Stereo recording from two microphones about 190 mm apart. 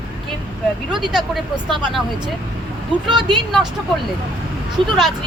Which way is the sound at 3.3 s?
Centre (ahead or behind).